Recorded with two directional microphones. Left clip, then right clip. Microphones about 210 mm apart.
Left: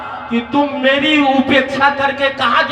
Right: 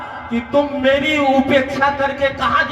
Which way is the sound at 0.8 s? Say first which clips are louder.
Left 5 dB; 15° right (ahead or behind).